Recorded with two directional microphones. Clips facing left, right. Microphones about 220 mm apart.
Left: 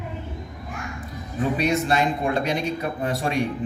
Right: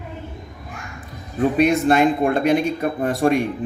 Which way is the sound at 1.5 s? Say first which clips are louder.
Right 6 dB; 55° right (ahead or behind).